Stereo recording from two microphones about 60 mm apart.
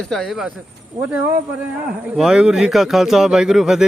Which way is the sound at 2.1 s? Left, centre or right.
Centre.